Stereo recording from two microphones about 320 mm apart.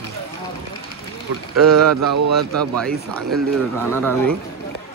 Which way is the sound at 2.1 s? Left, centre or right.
Right.